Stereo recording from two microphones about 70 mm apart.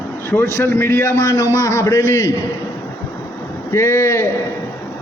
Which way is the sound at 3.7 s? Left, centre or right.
Left.